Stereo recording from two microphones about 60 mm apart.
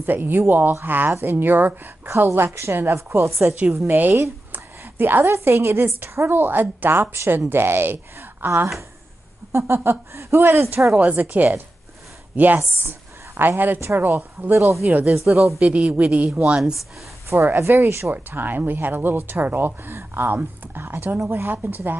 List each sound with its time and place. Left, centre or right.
0.0 s a woman's voice: right
3.8 s a woman's voice: right
9.5 s a woman's voice: right
11.0 s a woman's voice: right
15.0 s speech: centre
15.6 s a woman's voice: right
17.3 s a woman's voice: right
18.1 s a woman's voice: right